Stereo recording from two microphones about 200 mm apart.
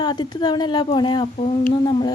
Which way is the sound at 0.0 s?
20° left (ahead or behind).